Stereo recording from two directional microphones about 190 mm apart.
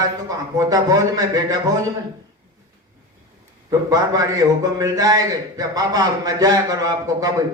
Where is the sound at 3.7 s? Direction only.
20° right (ahead or behind).